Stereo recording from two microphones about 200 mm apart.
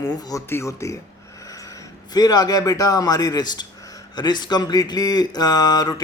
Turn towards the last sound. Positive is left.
turn(degrees=20)  # may be behind; listen again after turning